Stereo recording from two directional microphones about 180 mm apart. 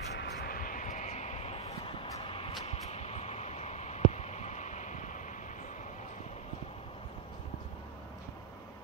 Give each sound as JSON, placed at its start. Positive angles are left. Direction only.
{"t": 0.1, "sound": "vehicle", "side_deg": 65}